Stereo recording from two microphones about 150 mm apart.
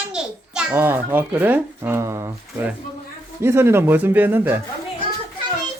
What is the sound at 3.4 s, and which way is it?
A child's voice, 15° right (ahead or behind).